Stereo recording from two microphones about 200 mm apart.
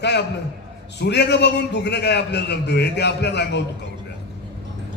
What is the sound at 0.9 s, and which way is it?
A man's voice, 55° left (ahead or behind).